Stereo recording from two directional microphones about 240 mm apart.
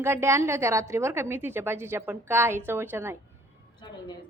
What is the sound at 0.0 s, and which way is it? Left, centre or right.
A woman's voice, centre.